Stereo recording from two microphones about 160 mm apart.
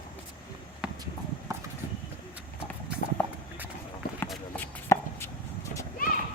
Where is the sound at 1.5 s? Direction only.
20° right (ahead or behind).